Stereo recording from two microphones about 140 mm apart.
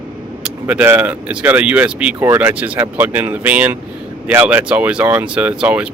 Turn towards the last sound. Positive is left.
turn(degrees=-10)  # may be behind; listen again after turning